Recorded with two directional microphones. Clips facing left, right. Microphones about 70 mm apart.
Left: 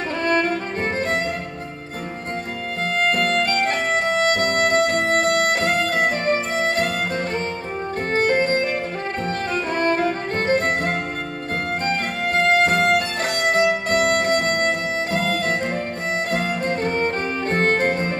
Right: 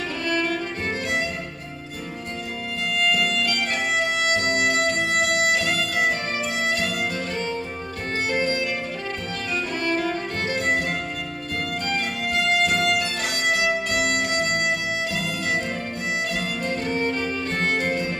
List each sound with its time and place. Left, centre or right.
0.2 s music: left
2.8 s music: left
8.1 s music: left